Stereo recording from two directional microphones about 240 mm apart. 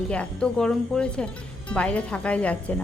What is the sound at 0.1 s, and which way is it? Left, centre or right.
A woman's voice, centre.